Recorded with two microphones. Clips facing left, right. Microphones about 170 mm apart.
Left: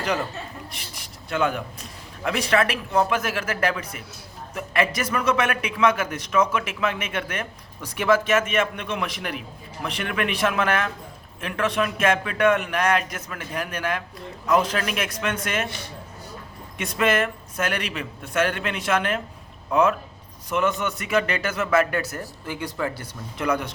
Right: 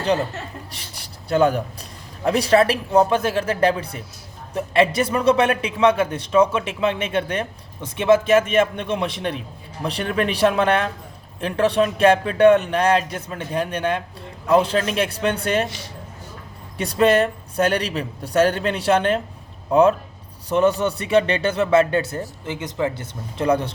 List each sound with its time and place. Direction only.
0.7 s a man's voice: 35° right (ahead or behind)
16.7 s speech: 35° right (ahead or behind)